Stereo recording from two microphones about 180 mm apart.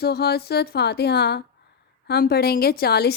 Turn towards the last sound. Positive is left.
turn(degrees=65)  # may be behind; listen again after turning